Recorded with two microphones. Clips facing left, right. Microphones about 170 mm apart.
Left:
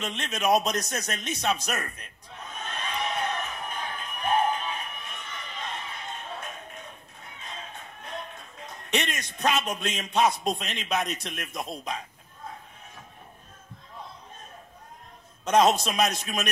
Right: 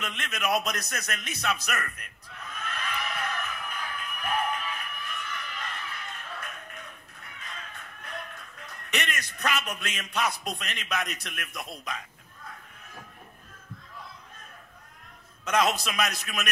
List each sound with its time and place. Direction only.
0.0 s a man's voice: 30° left (ahead or behind)
2.3 s music: 30° left (ahead or behind)
10.1 s a man's voice: 30° left (ahead or behind)
15.5 s a man's voice: 30° left (ahead or behind)